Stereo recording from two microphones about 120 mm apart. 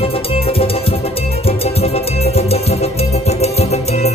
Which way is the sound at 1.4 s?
55° left (ahead or behind).